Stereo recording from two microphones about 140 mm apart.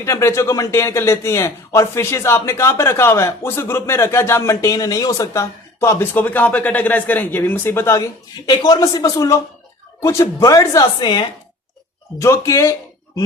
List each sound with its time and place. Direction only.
0.0 s speech: 20° left (ahead or behind)
12.2 s speech: 20° left (ahead or behind)